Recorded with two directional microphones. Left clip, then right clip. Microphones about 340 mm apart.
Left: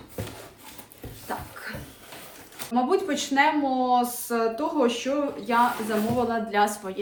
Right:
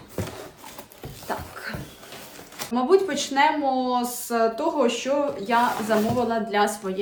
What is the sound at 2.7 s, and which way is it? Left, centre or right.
Speech, centre.